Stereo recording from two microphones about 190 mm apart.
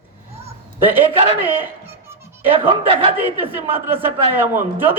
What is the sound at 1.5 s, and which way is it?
Music, 10° right (ahead or behind).